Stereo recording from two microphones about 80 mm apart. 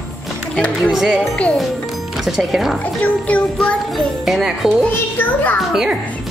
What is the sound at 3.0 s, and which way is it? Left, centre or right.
Child singing, centre.